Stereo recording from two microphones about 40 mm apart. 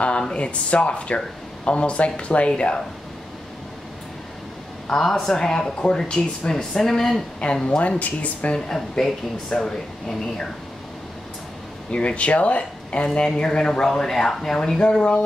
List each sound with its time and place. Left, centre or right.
0.4 s speech: left
4.9 s speech: centre
6.5 s speech: centre
7.6 s speech: left
8.5 s speech: centre
11.9 s speech: left; by 14.8 s centre
14.8 s speech: centre